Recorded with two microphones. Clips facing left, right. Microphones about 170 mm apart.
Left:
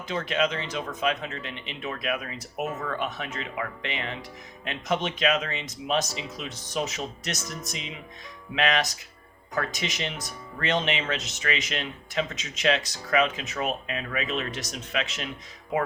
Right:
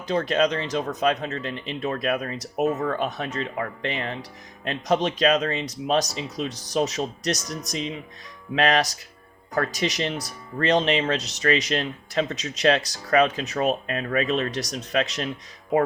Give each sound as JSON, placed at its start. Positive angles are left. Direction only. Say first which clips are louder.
{"t": 0.1, "sound": "speech", "louder": "right 5 dB", "side_deg": -35}